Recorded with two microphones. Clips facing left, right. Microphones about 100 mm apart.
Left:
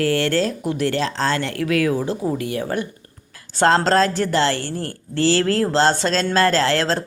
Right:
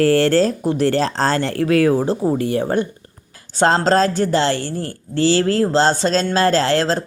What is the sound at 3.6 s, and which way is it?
Speech, 20° right (ahead or behind).